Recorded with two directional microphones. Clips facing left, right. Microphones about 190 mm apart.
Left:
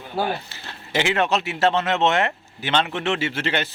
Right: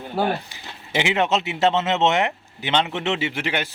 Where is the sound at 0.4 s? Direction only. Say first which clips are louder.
Left 1 dB; 15° right (ahead or behind).